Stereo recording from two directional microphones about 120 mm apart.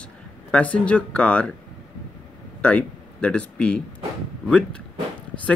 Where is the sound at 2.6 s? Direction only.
10° left (ahead or behind).